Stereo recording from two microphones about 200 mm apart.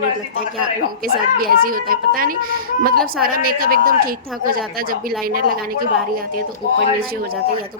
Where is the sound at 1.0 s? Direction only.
45° right (ahead or behind).